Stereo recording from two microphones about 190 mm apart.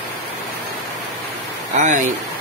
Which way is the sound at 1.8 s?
40° right (ahead or behind).